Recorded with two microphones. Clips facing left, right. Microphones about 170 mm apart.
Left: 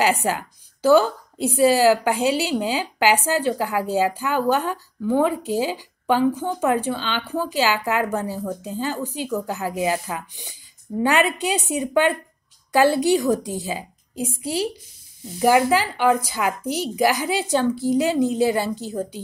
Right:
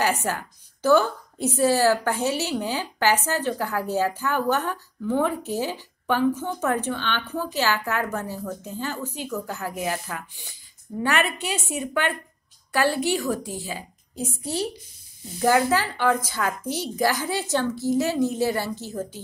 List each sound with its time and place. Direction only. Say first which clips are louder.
0.0 s a woman's voice: left 4 dB; 15° left (ahead or behind)